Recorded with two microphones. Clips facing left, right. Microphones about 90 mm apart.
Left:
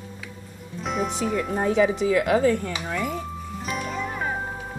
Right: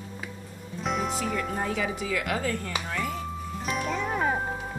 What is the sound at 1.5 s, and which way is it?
A woman's voice, 30° left (ahead or behind).